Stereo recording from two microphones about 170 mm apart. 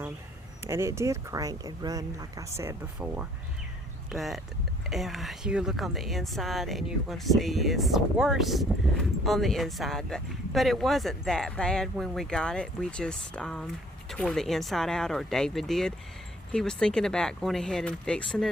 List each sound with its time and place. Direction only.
0.6 s a woman's voice: 15° right (ahead or behind); by 18.4 s 5° left (ahead or behind)